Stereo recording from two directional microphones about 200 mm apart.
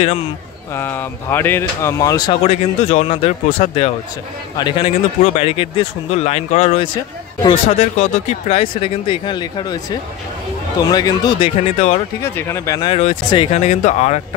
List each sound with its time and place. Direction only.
0.7 s speech: 10° left (ahead or behind)
2.4 s speech: 35° left (ahead or behind)
12.2 s speech: 10° left (ahead or behind)
12.9 s speech: 30° left (ahead or behind)